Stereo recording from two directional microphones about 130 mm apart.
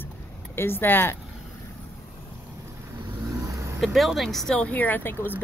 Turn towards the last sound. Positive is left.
turn(degrees=15)  # may be behind; listen again after turning